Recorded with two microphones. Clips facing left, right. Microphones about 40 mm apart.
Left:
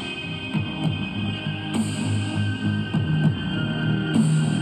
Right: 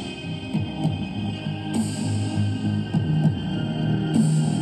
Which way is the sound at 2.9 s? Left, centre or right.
Left.